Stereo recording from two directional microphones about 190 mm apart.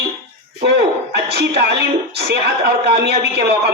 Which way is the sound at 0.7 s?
60° right (ahead or behind).